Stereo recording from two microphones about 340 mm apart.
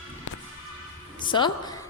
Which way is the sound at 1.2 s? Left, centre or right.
Centre.